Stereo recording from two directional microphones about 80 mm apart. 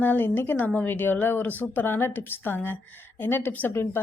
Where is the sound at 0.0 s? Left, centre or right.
Left.